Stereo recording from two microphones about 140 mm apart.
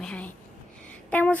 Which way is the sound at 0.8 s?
10° left (ahead or behind).